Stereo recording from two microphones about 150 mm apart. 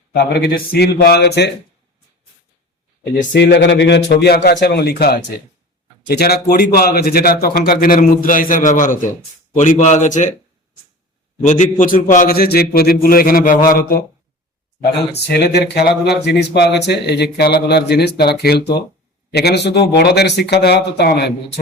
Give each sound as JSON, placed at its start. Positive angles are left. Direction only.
{"t": 0.1, "sound": "speech", "side_deg": 90}
{"t": 4.1, "sound": "a man's voice", "side_deg": 90}
{"t": 11.4, "sound": "a man's voice", "side_deg": 55}
{"t": 14.8, "sound": "speech", "side_deg": 90}